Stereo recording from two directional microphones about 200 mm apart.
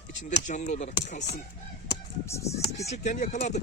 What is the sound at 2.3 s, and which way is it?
Speech, 15° left (ahead or behind).